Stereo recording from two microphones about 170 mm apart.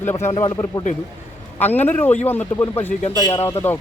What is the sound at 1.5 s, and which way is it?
Speech, 10° left (ahead or behind).